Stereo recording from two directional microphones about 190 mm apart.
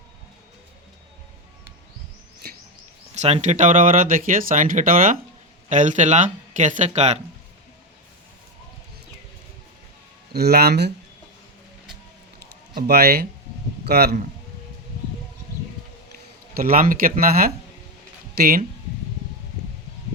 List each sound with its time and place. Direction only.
2.4 s bird: 55° right (ahead or behind)
3.2 s speech: 35° right (ahead or behind)
10.3 s speech: 55° right (ahead or behind)
12.4 s a sound: 55° right (ahead or behind)
13.8 s speech: 55° right (ahead or behind)
16.6 s speech: 50° right (ahead or behind)